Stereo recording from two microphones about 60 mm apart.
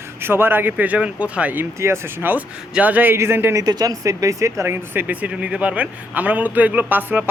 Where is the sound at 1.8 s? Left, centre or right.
Right.